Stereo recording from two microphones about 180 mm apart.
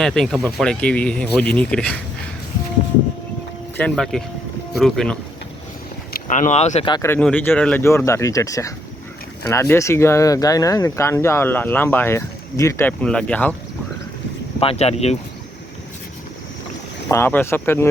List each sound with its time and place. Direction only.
0.0 s speech: centre (ahead or behind)
3.8 s speech: 5° left (ahead or behind)
6.1 s speech: 45° left (ahead or behind)
6.9 s speech: 15° left (ahead or behind)
14.6 s speech: 35° left (ahead or behind)
17.1 s speech: 15° left (ahead or behind)